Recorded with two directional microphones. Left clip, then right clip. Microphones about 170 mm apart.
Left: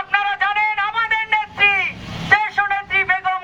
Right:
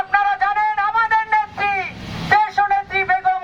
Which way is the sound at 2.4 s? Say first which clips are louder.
Right 2 dB; 10° left (ahead or behind).